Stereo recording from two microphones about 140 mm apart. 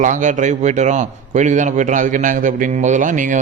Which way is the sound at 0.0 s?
65° right (ahead or behind).